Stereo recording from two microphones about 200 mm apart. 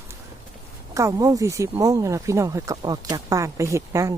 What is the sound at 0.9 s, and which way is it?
Speech, 15° right (ahead or behind).